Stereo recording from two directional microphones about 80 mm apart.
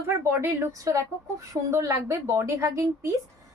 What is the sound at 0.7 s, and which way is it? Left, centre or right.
A woman's voice, right.